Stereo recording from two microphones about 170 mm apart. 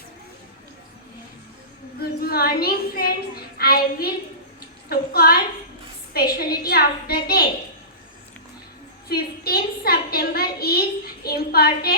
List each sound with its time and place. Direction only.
2.0 s a woman's voice: 65° left (ahead or behind)
9.0 s a woman's voice: 65° left (ahead or behind)